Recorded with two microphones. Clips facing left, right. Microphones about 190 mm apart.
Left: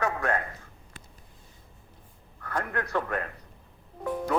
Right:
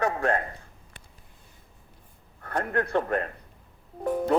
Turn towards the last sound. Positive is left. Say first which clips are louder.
# right 4 dB
turn(degrees=-35)  # may be behind; listen again after turning